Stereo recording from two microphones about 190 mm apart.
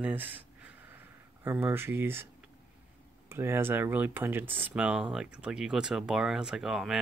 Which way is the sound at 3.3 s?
10° right (ahead or behind).